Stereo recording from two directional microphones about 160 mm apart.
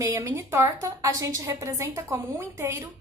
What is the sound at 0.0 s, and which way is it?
A woman's voice, 20° right (ahead or behind).